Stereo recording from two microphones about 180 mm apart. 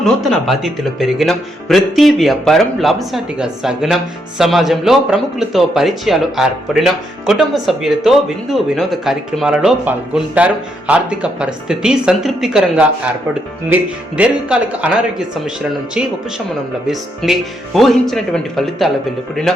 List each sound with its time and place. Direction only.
0.0 s speech: centre (ahead or behind)
14.2 s speech: 5° right (ahead or behind)